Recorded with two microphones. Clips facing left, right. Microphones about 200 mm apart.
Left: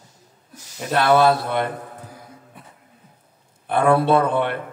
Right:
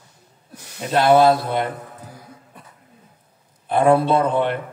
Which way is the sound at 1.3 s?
60° left (ahead or behind).